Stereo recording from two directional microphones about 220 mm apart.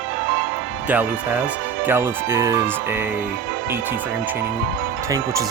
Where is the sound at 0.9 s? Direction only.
5° right (ahead or behind).